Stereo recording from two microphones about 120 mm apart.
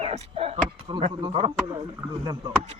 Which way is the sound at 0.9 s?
45° right (ahead or behind).